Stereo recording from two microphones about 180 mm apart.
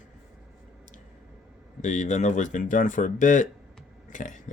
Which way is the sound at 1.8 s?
40° left (ahead or behind).